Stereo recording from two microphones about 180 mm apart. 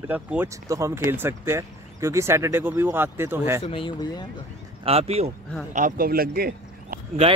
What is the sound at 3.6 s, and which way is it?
Speech, 30° left (ahead or behind).